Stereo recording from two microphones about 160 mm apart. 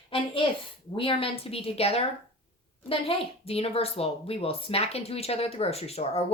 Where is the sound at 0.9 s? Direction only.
35° left (ahead or behind).